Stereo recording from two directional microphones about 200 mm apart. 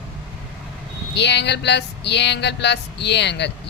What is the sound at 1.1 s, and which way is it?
Speech, 60° left (ahead or behind).